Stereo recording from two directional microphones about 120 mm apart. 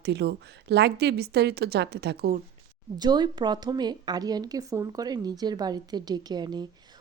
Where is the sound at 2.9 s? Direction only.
35° right (ahead or behind).